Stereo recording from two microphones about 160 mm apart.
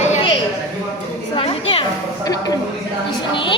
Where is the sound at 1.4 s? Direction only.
35° left (ahead or behind).